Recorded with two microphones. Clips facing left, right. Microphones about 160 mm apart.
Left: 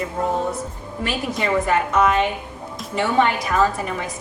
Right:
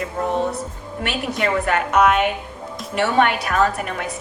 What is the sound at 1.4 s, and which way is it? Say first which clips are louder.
A woman's voice: left 1 dB; 70° right (ahead or behind).